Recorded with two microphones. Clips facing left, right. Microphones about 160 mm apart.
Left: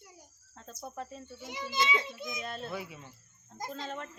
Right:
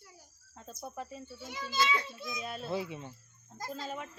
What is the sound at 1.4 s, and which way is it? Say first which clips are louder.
A child's voice: even; 15° left (ahead or behind).